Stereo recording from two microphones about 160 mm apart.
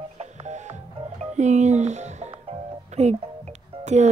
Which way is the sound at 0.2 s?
45° right (ahead or behind).